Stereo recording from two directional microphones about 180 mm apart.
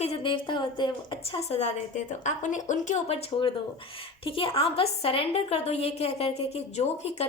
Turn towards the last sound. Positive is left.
turn(degrees=35)  # may be behind; listen again after turning